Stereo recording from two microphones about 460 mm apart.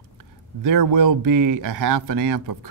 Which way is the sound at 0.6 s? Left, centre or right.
Right.